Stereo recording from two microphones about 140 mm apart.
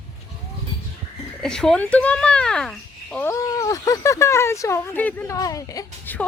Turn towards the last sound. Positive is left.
turn(degrees=15)  # may be behind; listen again after turning